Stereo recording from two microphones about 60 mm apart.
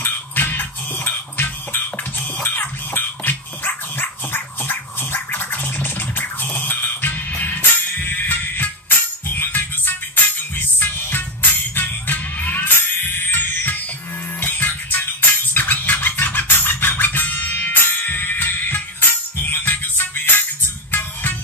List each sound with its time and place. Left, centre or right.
0.0 s music: left